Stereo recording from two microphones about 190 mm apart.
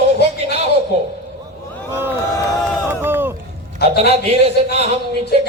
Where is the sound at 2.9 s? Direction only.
10° right (ahead or behind).